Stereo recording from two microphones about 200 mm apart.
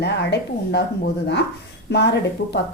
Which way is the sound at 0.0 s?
55° left (ahead or behind).